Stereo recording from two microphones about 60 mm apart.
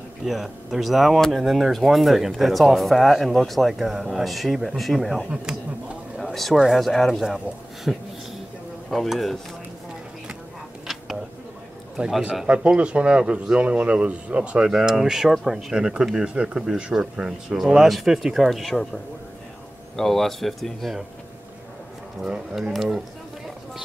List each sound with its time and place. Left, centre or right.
0.2 s speech: centre
5.3 s speech: centre
6.3 s speech: centre
12.0 s speech: right; by 18.9 s centre
20.0 s speech: centre
22.2 s speech: centre